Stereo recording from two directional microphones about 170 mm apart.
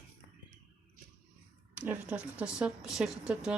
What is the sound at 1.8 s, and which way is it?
Speech, 10° right (ahead or behind).